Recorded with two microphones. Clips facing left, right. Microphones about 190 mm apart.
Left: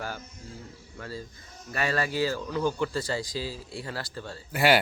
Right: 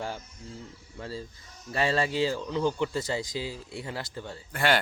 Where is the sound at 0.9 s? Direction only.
25° right (ahead or behind).